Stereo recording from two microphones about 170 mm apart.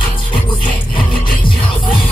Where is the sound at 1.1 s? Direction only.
30° left (ahead or behind).